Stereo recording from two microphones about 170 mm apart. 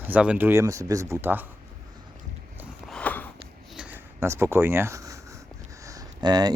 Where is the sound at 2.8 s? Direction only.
5° left (ahead or behind).